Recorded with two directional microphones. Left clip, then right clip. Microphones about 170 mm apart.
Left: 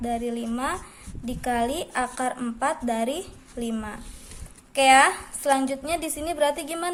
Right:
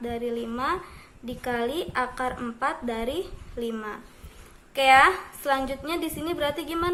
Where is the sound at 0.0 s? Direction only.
40° left (ahead or behind).